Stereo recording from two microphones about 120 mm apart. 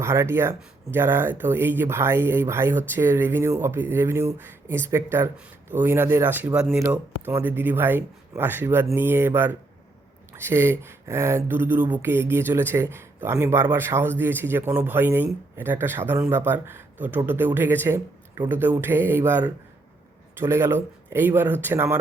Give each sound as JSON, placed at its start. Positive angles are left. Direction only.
{"t": 0.0, "sound": "speech", "side_deg": -20}
{"t": 6.7, "sound": "speech", "side_deg": -20}
{"t": 20.4, "sound": "speech", "side_deg": -20}